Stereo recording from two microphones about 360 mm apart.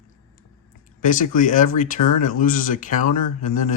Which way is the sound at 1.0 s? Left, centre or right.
Left.